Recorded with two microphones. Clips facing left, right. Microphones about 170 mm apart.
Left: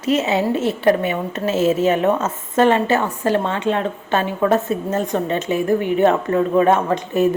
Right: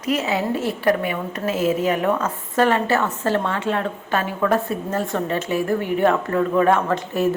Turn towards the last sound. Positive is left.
turn(degrees=15)  # may be behind; listen again after turning